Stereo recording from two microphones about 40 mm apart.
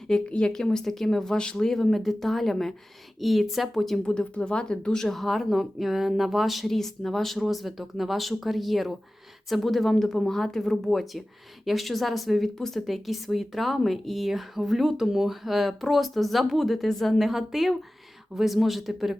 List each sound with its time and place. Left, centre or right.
0.3 s speech: left
0.5 s speech: centre
4.0 s speech: left
5.0 s speech: centre
12.5 s speech: centre
12.8 s speech: centre